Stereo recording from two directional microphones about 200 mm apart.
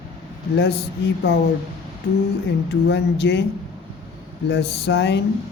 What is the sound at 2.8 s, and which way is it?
Speech, 60° left (ahead or behind).